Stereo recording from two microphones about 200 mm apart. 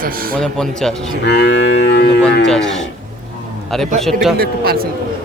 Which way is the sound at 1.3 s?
55° left (ahead or behind).